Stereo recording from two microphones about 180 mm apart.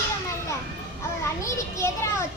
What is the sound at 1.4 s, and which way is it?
Speech, 15° left (ahead or behind).